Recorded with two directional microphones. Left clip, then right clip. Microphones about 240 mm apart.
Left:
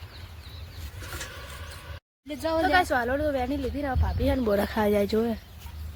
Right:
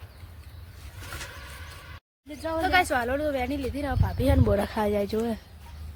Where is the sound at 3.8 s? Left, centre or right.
Right.